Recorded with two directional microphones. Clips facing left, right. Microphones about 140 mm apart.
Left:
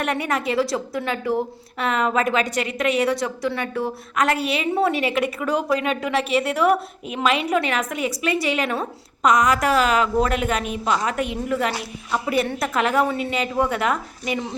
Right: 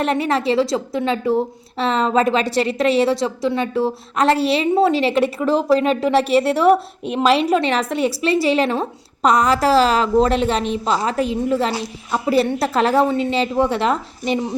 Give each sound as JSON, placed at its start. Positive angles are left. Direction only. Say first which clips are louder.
{"t": 0.0, "sound": "a woman's voice", "louder": "right 5 dB", "side_deg": -25}